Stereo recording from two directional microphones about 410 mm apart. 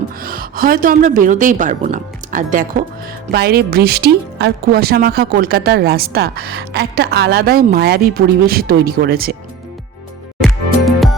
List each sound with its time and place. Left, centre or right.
0.2 s a woman's voice: right
10.4 s music: centre